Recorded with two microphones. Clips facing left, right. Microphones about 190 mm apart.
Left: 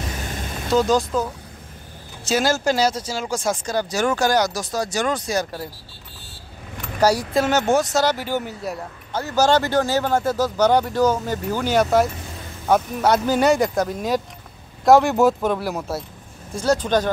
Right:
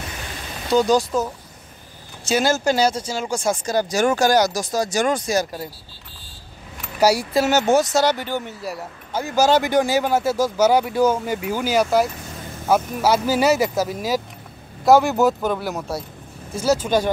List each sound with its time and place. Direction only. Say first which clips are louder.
0.7 s speech: right 1 dB; centre (ahead or behind)
3.6 s speech: right 5 dB; 10° right (ahead or behind)
7.0 s speech: right 1 dB; 10° right (ahead or behind)